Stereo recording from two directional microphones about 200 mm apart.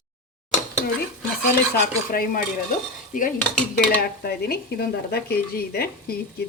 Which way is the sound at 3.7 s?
50° left (ahead or behind).